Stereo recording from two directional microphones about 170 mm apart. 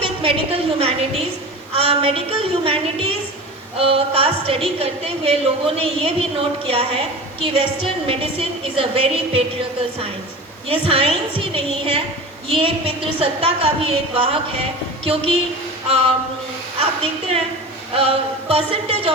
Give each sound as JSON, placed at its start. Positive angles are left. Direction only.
{"t": 0.0, "sound": "a sound", "side_deg": -35}
{"t": 1.7, "sound": "a woman's voice", "side_deg": -35}
{"t": 8.0, "sound": "a woman's voice", "side_deg": -35}
{"t": 10.7, "sound": "a woman's voice", "side_deg": -35}
{"t": 17.9, "sound": "a woman's voice", "side_deg": -35}